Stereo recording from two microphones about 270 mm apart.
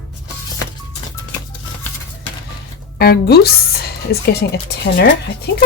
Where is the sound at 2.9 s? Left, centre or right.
Left.